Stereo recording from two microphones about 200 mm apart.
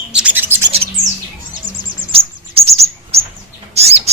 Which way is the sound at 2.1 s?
30° right (ahead or behind).